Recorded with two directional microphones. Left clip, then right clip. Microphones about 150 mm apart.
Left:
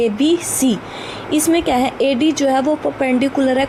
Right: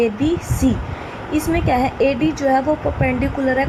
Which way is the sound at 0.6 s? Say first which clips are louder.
Even; 10° left (ahead or behind).